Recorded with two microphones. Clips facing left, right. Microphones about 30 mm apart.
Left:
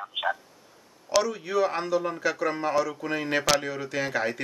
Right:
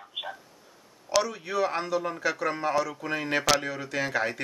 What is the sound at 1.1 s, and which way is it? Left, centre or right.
A man's voice, centre.